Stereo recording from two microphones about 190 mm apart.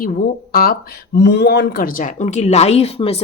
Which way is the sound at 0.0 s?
50° left (ahead or behind).